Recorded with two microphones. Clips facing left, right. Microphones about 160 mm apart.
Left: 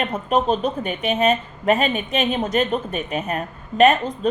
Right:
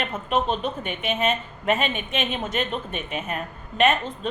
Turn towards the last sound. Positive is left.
turn(degrees=40)  # may be behind; listen again after turning